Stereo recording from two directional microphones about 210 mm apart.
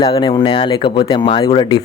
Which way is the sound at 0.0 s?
20° left (ahead or behind).